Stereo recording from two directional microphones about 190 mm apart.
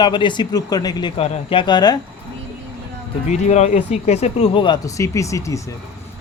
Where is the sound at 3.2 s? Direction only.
35° left (ahead or behind).